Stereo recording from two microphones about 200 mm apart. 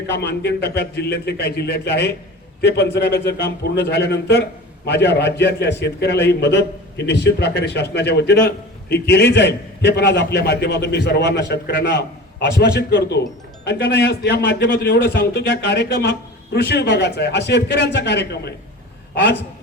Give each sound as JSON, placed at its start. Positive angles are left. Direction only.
{"t": 0.2, "sound": "a man's voice", "side_deg": 55}